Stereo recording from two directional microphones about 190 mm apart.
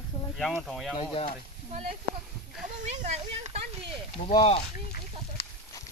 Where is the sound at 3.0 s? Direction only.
35° right (ahead or behind).